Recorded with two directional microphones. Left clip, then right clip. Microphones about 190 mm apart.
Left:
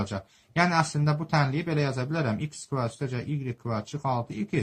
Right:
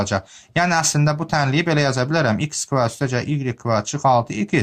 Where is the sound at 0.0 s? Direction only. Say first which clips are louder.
Right 12 dB; 35° right (ahead or behind).